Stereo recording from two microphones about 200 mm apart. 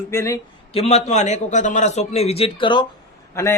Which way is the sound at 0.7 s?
30° left (ahead or behind).